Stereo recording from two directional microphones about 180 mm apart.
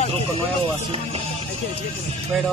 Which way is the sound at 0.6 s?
30° right (ahead or behind).